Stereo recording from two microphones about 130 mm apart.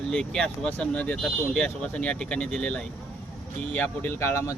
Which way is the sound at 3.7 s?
15° left (ahead or behind).